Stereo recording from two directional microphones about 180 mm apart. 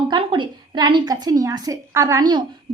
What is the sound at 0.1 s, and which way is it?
A woman's voice, 30° right (ahead or behind).